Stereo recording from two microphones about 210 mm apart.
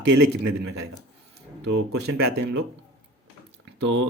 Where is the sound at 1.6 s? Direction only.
55° right (ahead or behind).